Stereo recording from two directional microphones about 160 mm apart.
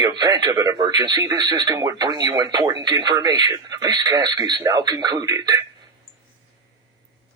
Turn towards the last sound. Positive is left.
turn(degrees=-20)  # may be behind; listen again after turning